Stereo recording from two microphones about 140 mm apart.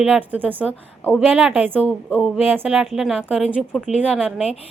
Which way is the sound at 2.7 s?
Centre (ahead or behind).